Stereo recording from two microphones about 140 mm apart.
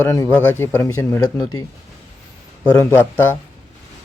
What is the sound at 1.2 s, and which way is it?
Speech, 30° left (ahead or behind).